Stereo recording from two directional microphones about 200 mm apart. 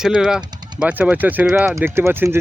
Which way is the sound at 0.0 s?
5° right (ahead or behind).